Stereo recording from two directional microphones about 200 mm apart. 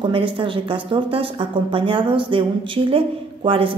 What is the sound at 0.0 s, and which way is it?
Speech, 25° right (ahead or behind).